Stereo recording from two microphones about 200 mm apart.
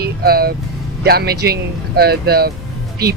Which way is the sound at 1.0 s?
50° right (ahead or behind).